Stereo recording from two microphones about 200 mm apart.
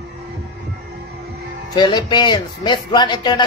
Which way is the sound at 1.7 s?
20° left (ahead or behind).